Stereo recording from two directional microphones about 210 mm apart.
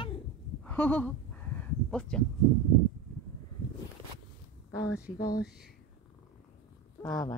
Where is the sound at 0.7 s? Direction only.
5° left (ahead or behind).